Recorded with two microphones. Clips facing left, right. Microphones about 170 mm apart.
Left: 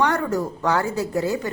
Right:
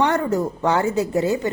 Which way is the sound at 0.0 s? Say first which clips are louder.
Right 2 dB; 20° right (ahead or behind).